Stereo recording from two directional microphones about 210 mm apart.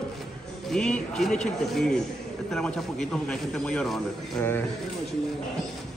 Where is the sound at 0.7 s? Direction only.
5° left (ahead or behind).